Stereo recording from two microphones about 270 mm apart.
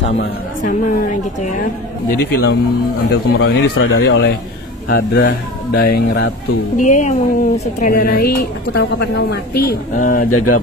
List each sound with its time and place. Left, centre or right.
0.0 s speech: left
10.3 s speech: left